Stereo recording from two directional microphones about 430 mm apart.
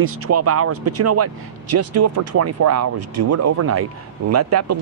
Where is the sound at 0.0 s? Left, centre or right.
Right.